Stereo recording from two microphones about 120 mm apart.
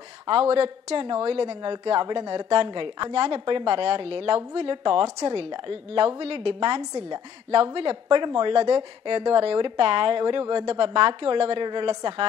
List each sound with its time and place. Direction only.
0.3 s a woman's voice: 50° right (ahead or behind)